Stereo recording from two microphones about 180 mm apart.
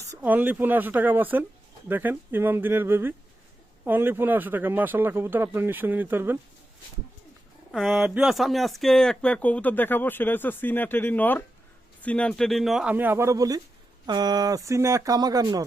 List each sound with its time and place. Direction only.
0.0 s speech: 15° right (ahead or behind)
7.7 s speech: centre (ahead or behind); by 15.6 s 20° right (ahead or behind)